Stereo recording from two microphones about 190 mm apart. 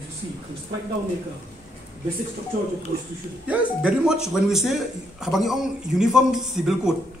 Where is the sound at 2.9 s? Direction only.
50° right (ahead or behind).